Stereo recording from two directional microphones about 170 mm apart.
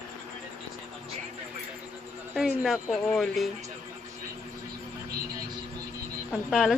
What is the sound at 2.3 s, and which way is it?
A woman's voice, centre (ahead or behind).